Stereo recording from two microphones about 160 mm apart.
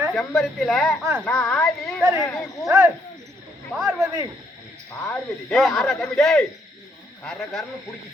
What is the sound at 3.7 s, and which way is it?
Speech, 5° right (ahead or behind).